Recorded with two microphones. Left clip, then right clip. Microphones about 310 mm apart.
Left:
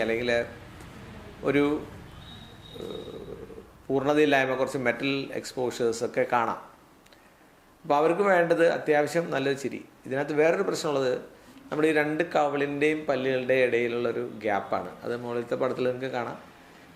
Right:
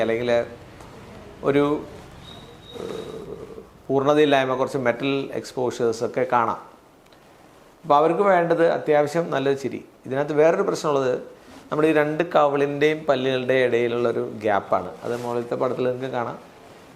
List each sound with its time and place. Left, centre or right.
0.0 s speech: centre
1.5 s speech: centre
3.9 s speech: centre
7.9 s speech: centre